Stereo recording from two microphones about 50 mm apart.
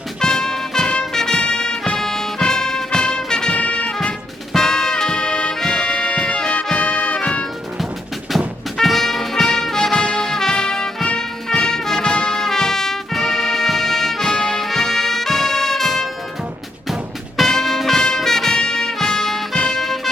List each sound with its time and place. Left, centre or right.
0.2 s music: centre
6.7 s brass instrument: centre
8.8 s brass instrument: centre
17.3 s music: centre